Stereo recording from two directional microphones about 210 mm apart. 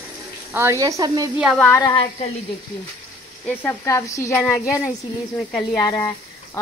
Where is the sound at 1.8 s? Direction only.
25° left (ahead or behind).